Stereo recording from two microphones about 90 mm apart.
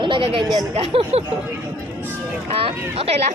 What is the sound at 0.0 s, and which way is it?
Speech, 70° right (ahead or behind).